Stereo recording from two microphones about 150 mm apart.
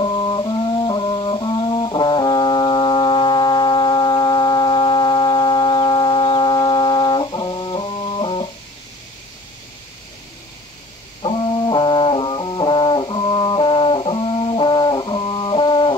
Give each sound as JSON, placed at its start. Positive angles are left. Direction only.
{"t": 0.0, "sound": "music", "side_deg": 30}
{"t": 11.2, "sound": "brass instrument", "side_deg": 30}